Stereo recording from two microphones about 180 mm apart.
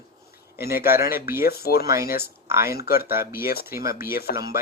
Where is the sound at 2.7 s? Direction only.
60° left (ahead or behind).